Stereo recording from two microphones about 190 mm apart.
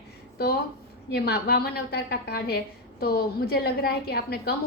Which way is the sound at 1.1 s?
60° left (ahead or behind).